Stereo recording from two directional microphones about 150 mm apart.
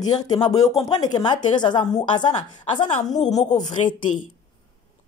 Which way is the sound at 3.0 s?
50° left (ahead or behind).